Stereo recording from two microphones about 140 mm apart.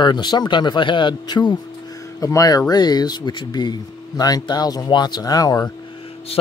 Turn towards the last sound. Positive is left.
turn(degrees=25)  # may be behind; listen again after turning